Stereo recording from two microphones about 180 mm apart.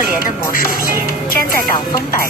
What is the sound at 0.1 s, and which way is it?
Music, 50° left (ahead or behind).